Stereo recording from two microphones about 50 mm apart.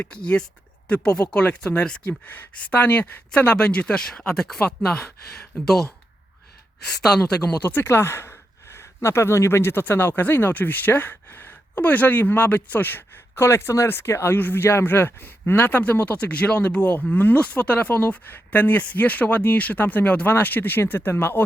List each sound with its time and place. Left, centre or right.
0.1 s speech: centre
2.0 s speech: left; by 5.7 s centre
7.0 s speech: centre
7.6 s speech: left
7.9 s speech: left
9.8 s speech: left
14.3 s speech: left